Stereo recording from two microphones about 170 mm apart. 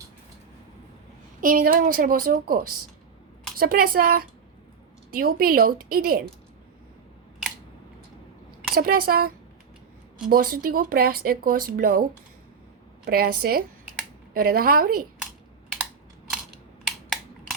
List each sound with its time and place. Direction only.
1.4 s speech: 55° right (ahead or behind)
8.7 s speech: 60° right (ahead or behind)
13.1 s speech: 60° right (ahead or behind)